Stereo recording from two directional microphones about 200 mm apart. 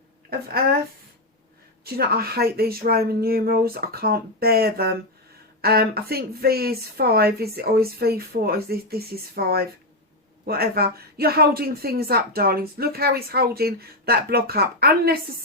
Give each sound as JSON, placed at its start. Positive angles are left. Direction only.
{"t": 0.3, "sound": "a man's voice", "side_deg": -50}
{"t": 1.8, "sound": "a man's voice", "side_deg": -50}